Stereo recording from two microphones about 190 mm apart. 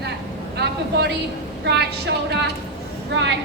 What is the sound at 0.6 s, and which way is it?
A woman's voice, 60° right (ahead or behind).